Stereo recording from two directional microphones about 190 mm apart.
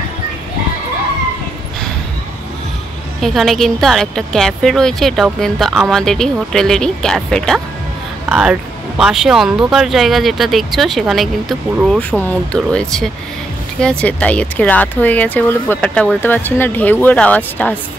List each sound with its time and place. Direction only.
3.2 s speech: centre (ahead or behind)